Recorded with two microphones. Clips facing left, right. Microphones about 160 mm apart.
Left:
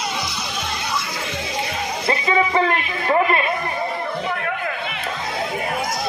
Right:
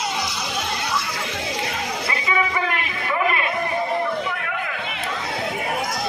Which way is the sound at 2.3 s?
35° left (ahead or behind).